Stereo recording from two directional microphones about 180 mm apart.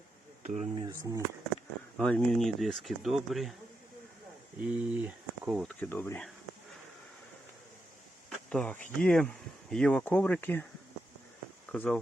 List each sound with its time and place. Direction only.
0.4 s speech: 40° right (ahead or behind)
0.8 s speech: 20° right (ahead or behind)
2.0 s speech: 5° left (ahead or behind)
4.6 s speech: 5° right (ahead or behind)
5.8 s speech: 10° left (ahead or behind)
8.3 s speech: 5° left (ahead or behind)
11.7 s speech: 5° left (ahead or behind)